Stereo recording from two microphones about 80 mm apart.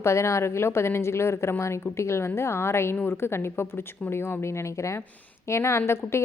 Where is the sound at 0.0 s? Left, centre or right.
Left.